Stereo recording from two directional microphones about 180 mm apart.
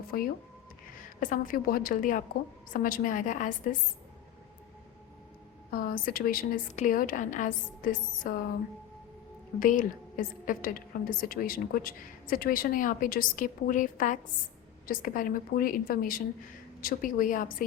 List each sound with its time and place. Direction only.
1.2 s a woman's voice: 50° left (ahead or behind)
5.7 s a woman's voice: 55° left (ahead or behind)
9.6 s a woman's voice: 50° left (ahead or behind)